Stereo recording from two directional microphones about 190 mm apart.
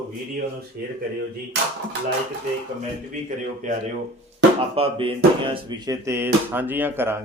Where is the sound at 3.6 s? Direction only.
40° right (ahead or behind).